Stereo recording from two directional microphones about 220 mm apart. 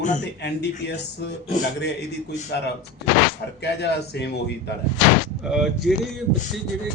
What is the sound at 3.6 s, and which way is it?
Speech, 50° left (ahead or behind).